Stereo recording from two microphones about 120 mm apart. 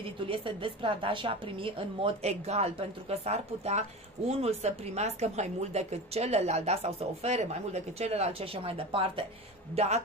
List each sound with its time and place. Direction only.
0.0 s a woman's voice: 50° right (ahead or behind)
9.8 s a woman's voice: 65° right (ahead or behind)